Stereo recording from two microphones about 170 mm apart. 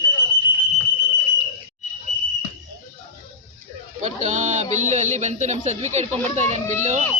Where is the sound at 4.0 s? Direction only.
45° right (ahead or behind).